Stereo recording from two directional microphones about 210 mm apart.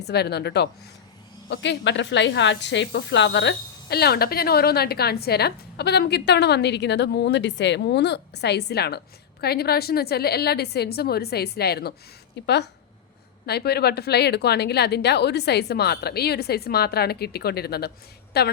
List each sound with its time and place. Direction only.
0.1 s a woman's voice: 50° left (ahead or behind)
13.4 s a woman's voice: 50° left (ahead or behind)